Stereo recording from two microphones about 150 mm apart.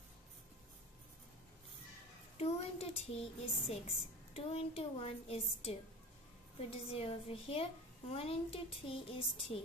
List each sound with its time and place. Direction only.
2.3 s a woman's voice: 40° left (ahead or behind)
6.9 s a child's voice: 40° left (ahead or behind)